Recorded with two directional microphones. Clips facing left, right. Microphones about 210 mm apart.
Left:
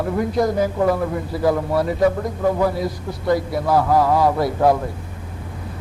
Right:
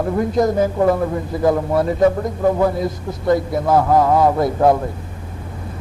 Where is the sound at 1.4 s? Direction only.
25° right (ahead or behind).